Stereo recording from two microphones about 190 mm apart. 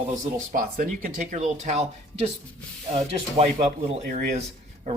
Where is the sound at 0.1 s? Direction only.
45° right (ahead or behind).